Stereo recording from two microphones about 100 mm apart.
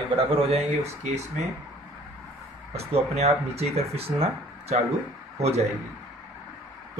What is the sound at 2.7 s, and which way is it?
Speech, 90° right.